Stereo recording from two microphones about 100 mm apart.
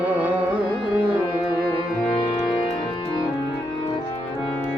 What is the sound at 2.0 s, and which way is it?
Music, 65° left (ahead or behind).